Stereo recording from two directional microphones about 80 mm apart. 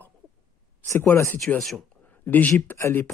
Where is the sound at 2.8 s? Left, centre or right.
Left.